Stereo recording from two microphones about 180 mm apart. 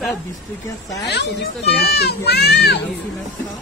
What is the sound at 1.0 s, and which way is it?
A child's voice, 70° left (ahead or behind).